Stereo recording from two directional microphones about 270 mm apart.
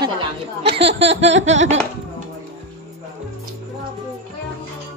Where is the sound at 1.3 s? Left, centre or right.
Right.